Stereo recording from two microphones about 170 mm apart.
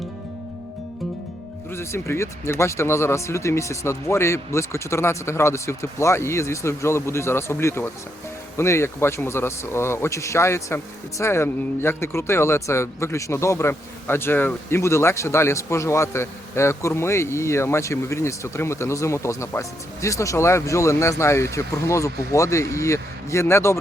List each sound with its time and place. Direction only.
1.7 s speech: 15° left (ahead or behind)